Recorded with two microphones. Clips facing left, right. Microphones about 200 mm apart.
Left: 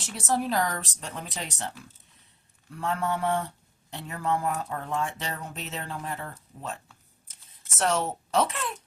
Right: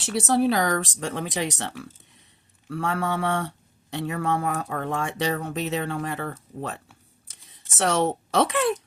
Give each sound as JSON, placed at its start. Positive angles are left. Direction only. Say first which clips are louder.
{"t": 0.0, "sound": "speech", "louder": "right 7 dB", "side_deg": -75}
{"t": 7.8, "sound": "a woman's voice", "louder": "right 4 dB", "side_deg": -75}